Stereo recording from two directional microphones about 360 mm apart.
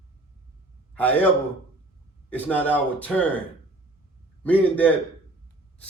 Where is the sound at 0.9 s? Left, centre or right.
Centre.